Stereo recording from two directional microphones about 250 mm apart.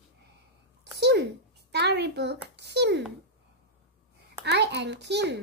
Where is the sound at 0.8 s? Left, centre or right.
Right.